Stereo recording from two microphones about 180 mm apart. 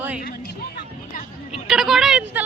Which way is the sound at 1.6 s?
Centre (ahead or behind).